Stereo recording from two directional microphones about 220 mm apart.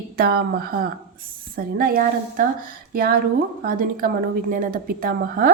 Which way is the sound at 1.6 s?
40° right (ahead or behind).